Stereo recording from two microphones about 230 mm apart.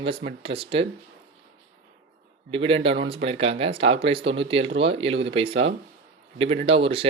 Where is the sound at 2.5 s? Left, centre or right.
Right.